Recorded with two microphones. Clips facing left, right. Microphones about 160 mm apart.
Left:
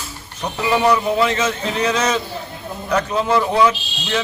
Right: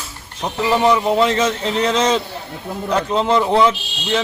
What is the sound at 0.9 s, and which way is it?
Speech, 30° right (ahead or behind).